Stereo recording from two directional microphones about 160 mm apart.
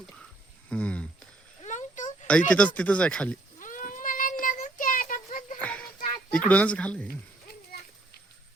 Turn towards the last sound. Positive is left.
turn(degrees=10)  # may be behind; listen again after turning